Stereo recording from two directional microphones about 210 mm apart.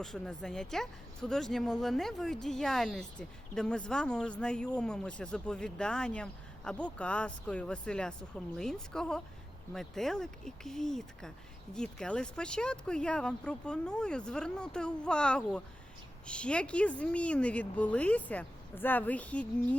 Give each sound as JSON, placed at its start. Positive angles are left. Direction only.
{"t": 0.0, "sound": "speech", "side_deg": 0}